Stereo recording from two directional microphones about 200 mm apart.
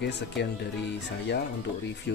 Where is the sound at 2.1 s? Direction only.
55° left (ahead or behind).